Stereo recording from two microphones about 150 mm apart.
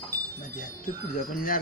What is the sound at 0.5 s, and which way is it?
Wind chime, 65° left (ahead or behind).